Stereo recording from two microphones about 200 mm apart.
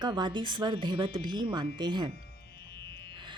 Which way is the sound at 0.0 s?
20° right (ahead or behind).